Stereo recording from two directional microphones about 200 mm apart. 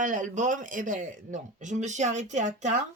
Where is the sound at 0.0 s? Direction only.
40° right (ahead or behind).